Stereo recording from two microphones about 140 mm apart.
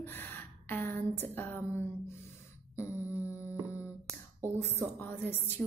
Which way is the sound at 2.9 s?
15° right (ahead or behind).